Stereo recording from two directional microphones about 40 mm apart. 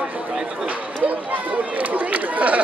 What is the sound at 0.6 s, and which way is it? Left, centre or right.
Run, right.